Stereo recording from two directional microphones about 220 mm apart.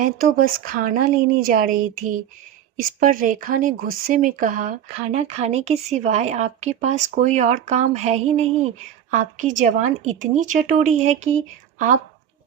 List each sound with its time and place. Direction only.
0.0 s speech: 40° right (ahead or behind)